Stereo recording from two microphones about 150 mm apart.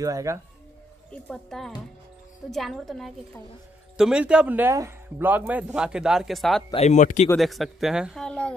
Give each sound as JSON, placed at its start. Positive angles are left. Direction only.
{"t": 0.0, "sound": "speech", "side_deg": -20}
{"t": 1.1, "sound": "speech", "side_deg": 5}
{"t": 6.7, "sound": "speech", "side_deg": 50}
{"t": 7.3, "sound": "speech", "side_deg": 0}